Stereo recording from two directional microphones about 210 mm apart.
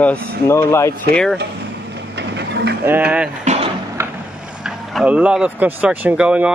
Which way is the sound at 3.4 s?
30° right (ahead or behind).